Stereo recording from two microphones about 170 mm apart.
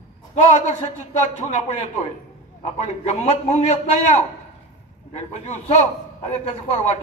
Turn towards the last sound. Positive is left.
turn(degrees=40)  # may be behind; listen again after turning